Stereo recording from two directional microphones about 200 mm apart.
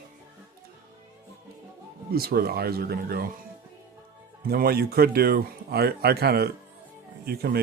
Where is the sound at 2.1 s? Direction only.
50° right (ahead or behind).